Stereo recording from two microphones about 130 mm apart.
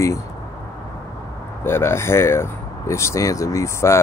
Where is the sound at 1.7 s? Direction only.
20° left (ahead or behind).